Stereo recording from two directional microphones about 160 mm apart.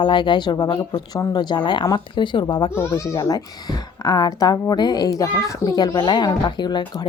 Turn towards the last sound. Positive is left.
turn(degrees=25)  # may be behind; listen again after turning